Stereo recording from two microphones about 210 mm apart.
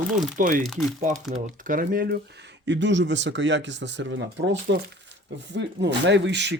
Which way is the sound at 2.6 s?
60° right (ahead or behind).